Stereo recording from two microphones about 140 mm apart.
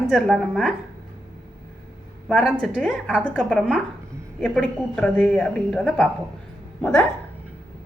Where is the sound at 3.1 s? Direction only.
5° right (ahead or behind).